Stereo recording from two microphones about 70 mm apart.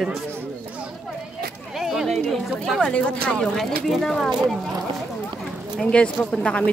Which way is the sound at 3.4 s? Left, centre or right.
Centre.